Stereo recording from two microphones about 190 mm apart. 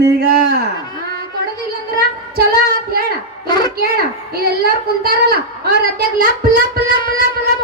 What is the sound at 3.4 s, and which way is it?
Speech, 20° left (ahead or behind).